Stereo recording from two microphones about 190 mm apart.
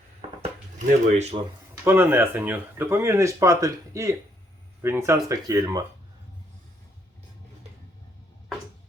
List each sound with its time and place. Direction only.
1.2 s speech: 35° right (ahead or behind)
1.8 s speech: 10° right (ahead or behind)